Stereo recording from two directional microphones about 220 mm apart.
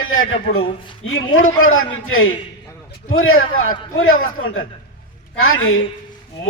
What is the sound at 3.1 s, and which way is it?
A man's voice, 65° left (ahead or behind).